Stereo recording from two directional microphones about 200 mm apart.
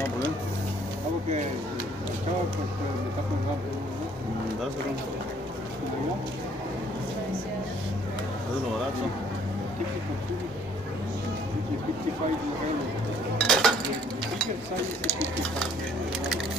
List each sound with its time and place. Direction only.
13.4 s cutlery: centre (ahead or behind)
15.0 s speech: 10° left (ahead or behind)